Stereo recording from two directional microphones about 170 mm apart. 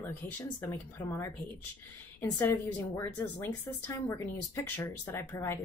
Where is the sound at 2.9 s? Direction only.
10° left (ahead or behind).